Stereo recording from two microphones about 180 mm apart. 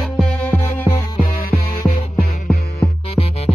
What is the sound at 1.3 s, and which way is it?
Music, 35° left (ahead or behind).